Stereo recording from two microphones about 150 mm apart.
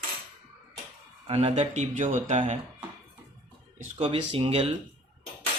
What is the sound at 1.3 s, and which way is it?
A man's voice, 45° right (ahead or behind).